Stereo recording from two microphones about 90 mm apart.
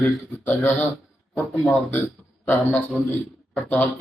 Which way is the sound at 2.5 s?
25° left (ahead or behind).